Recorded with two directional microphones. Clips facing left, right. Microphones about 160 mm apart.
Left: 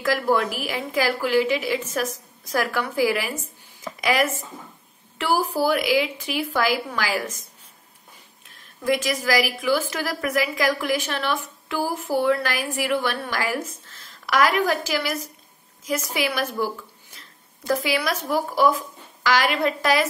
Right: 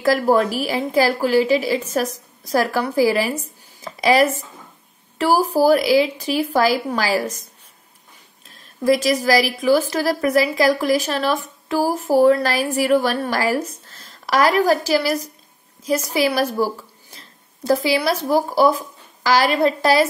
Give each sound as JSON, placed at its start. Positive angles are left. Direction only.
{"t": 0.0, "sound": "a woman's voice", "side_deg": -40}
{"t": 8.8, "sound": "a woman's voice", "side_deg": -40}